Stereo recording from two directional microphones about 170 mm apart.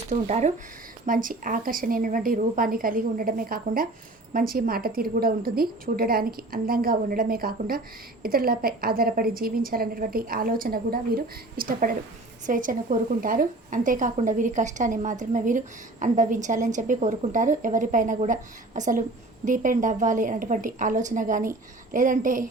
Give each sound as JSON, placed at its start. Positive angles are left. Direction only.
{"t": 0.1, "sound": "speech", "side_deg": -40}
{"t": 1.0, "sound": "a woman's voice", "side_deg": -50}